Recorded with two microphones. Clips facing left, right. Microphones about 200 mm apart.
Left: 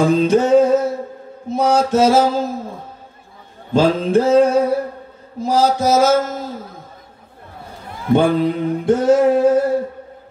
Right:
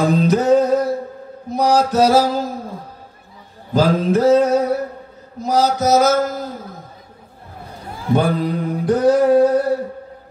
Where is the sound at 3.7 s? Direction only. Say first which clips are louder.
Left 1 dB; 30° left (ahead or behind).